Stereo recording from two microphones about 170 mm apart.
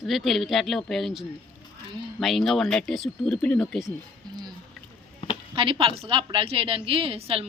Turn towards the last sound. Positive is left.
turn(degrees=-35)  # may be behind; listen again after turning